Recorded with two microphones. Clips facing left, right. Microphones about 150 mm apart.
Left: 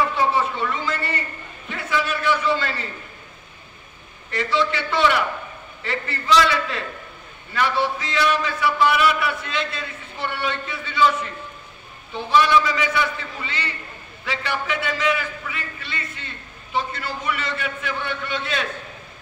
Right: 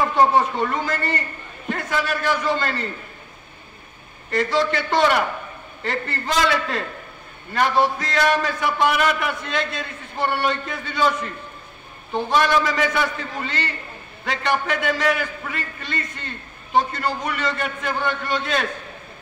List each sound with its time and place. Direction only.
0.0 s a man's voice: 45° right (ahead or behind)
4.3 s a man's voice: 45° right (ahead or behind)